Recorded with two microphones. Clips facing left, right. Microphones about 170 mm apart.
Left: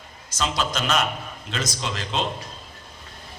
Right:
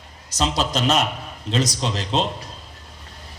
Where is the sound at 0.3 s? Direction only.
35° right (ahead or behind).